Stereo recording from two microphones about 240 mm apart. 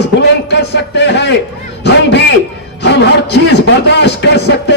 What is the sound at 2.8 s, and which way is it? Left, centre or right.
Speech, left.